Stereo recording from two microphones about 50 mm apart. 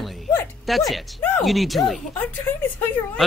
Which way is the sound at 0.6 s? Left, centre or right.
Centre.